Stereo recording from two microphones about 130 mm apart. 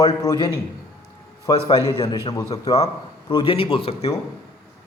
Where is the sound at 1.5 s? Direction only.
30° left (ahead or behind).